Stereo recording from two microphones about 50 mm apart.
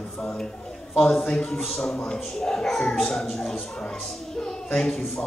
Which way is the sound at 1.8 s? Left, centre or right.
Centre.